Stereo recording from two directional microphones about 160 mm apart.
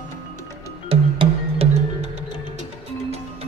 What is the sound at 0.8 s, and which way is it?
Music, 35° right (ahead or behind).